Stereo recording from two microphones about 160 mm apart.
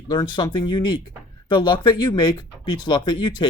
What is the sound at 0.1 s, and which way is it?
Speech, 25° left (ahead or behind).